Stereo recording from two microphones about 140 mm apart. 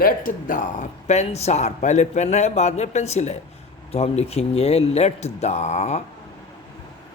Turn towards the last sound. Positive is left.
turn(degrees=50)  # may be behind; listen again after turning